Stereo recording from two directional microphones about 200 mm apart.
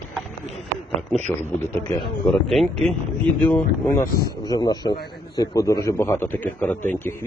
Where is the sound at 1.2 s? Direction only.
10° left (ahead or behind).